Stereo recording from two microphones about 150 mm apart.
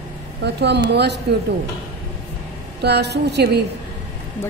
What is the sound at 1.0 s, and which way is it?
Speech, 90° right.